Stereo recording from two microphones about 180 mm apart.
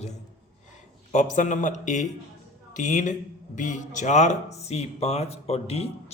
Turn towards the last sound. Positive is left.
turn(degrees=35)  # may be behind; listen again after turning